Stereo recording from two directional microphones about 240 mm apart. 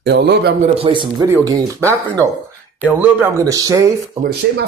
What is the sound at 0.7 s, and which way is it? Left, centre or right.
Speech, right.